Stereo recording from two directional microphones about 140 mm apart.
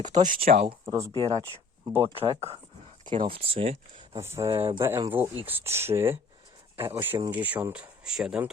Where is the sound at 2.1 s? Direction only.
45° right (ahead or behind).